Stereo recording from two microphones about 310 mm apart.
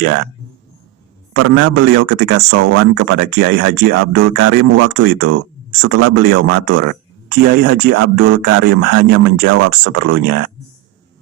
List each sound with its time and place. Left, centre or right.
1.3 s speech: right